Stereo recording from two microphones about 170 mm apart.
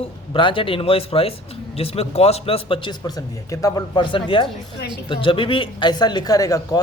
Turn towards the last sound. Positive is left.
turn(degrees=20)  # may be behind; listen again after turning